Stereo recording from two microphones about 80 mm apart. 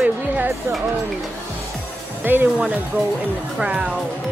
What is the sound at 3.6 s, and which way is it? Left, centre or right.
Speech, centre.